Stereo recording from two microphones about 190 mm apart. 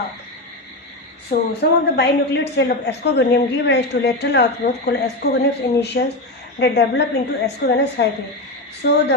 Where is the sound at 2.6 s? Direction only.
60° left (ahead or behind).